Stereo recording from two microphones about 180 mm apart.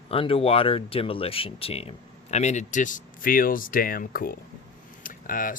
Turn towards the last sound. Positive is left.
turn(degrees=50)  # may be behind; listen again after turning